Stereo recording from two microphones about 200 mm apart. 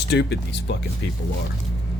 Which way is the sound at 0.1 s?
60° left (ahead or behind).